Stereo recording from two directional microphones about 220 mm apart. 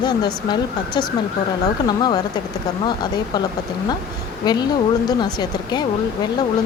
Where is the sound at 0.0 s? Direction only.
20° left (ahead or behind).